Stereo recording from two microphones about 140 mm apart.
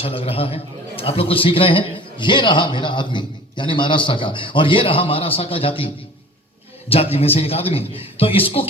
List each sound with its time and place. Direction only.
0.0 s a man's voice: 40° left (ahead or behind)
6.9 s a man's voice: 45° left (ahead or behind)